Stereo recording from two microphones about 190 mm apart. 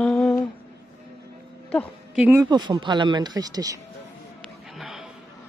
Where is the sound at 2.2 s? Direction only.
10° right (ahead or behind).